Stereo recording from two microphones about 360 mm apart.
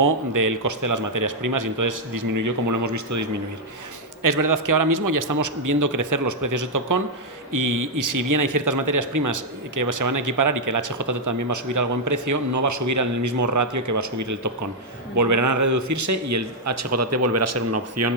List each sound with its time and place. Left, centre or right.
0.0 s a man's voice: right